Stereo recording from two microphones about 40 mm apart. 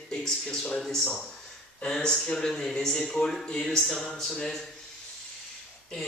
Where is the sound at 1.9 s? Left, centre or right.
Centre.